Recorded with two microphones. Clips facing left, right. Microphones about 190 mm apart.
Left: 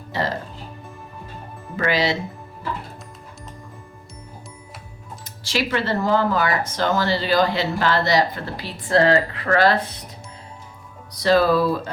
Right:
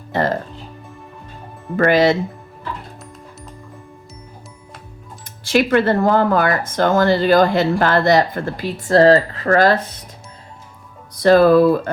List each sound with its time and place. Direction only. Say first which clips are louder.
0.1 s music: right 6 dB; 50° right (ahead or behind)
1.7 s speech: right 8 dB; 50° right (ahead or behind)
5.5 s speech: right 8 dB; 55° right (ahead or behind)
11.1 s speech: right 6 dB; 50° right (ahead or behind)